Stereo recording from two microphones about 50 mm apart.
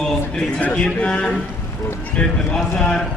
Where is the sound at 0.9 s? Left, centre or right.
Centre.